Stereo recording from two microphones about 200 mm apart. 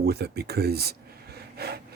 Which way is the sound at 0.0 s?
55° right (ahead or behind).